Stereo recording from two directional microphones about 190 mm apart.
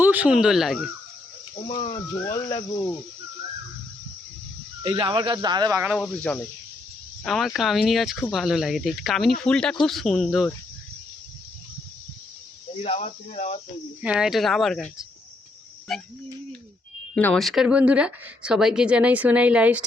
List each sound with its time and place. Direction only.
0.0 s speech: 10° right (ahead or behind)
1.6 s speech: 30° left (ahead or behind)
4.8 s speech: 25° right (ahead or behind)
5.8 s speech: 5° right (ahead or behind)
7.3 s speech: centre (ahead or behind)
12.8 s speech: 35° left (ahead or behind)
14.0 s speech: 5° right (ahead or behind)
17.2 s speech: 5° left (ahead or behind)